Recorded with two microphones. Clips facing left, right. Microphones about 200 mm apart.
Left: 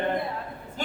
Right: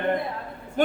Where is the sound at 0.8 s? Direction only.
55° right (ahead or behind).